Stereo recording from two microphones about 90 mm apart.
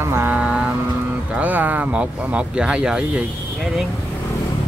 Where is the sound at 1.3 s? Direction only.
20° right (ahead or behind).